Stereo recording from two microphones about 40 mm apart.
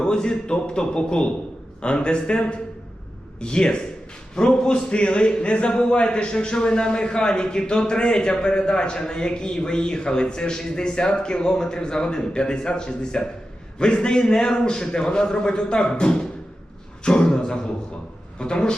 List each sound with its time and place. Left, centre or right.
0.0 s speech: left
17.0 s a sound: left
18.3 s speech: centre